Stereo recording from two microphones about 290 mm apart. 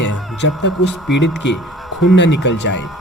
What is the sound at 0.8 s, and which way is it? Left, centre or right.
Speech, centre.